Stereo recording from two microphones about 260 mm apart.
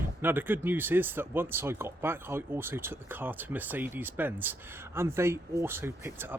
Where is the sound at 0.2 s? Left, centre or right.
Centre.